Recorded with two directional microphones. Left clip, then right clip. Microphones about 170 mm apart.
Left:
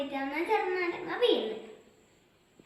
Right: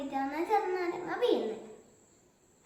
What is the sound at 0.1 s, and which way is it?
A child's voice, 20° right (ahead or behind).